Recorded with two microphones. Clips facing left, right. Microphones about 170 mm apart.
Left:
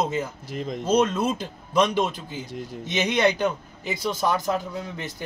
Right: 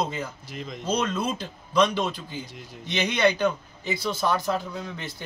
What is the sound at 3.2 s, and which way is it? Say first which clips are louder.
Speech: even; 20° left (ahead or behind).